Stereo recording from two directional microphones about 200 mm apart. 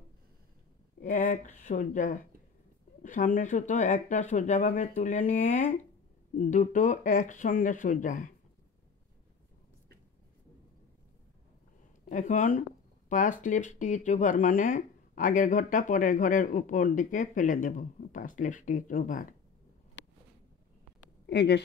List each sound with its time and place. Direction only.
1.0 s speech: 45° left (ahead or behind)
12.0 s speech: 40° left (ahead or behind)
21.3 s speech: 55° left (ahead or behind)